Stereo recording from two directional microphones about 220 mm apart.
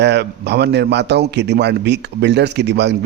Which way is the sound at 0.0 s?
50° right (ahead or behind).